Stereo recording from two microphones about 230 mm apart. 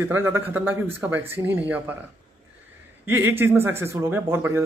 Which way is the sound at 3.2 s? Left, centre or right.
Centre.